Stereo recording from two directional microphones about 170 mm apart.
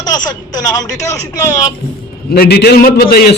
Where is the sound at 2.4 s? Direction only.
70° left (ahead or behind).